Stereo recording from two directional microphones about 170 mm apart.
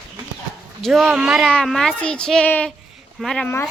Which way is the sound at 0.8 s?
Centre (ahead or behind).